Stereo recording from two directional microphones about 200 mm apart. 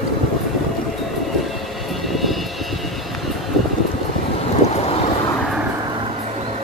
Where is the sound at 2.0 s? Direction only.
Centre (ahead or behind).